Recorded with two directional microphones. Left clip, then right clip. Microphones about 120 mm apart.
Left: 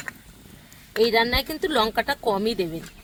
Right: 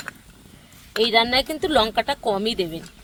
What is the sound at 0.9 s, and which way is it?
Speech, 20° right (ahead or behind).